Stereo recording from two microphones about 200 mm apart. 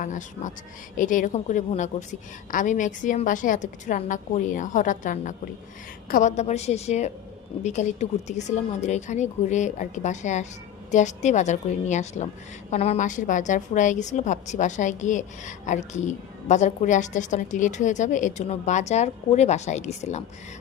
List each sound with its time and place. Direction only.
0.0 s a woman's voice: 40° left (ahead or behind)